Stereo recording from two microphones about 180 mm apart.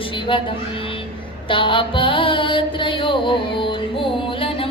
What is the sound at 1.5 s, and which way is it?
Mantra, 30° left (ahead or behind).